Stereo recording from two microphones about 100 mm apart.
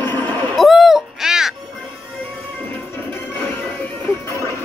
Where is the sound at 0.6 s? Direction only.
Centre (ahead or behind).